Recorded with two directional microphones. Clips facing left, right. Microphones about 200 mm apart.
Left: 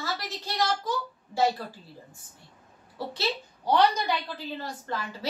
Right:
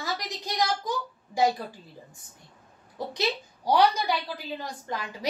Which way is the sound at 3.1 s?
10° right (ahead or behind).